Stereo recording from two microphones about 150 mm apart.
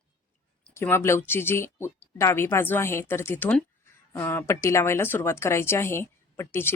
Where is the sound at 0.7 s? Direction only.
15° left (ahead or behind).